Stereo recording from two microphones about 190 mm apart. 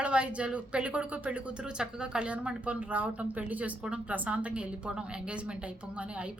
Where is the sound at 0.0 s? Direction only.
5° right (ahead or behind).